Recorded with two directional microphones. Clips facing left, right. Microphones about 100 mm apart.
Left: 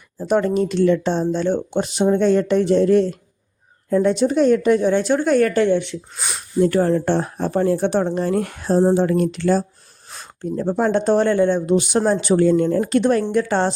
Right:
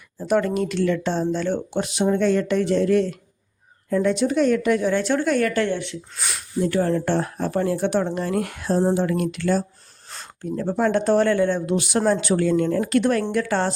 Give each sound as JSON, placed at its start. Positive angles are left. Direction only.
{"t": 0.2, "sound": "speech", "side_deg": 25}
{"t": 5.2, "sound": "speech", "side_deg": 30}
{"t": 6.8, "sound": "speech", "side_deg": 25}